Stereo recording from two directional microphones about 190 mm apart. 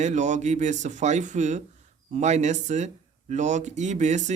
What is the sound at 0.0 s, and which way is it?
Speech, 40° right (ahead or behind).